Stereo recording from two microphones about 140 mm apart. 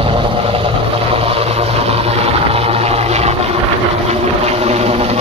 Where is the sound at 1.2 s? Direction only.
45° right (ahead or behind).